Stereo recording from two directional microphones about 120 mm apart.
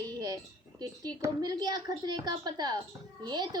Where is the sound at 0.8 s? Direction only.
35° right (ahead or behind).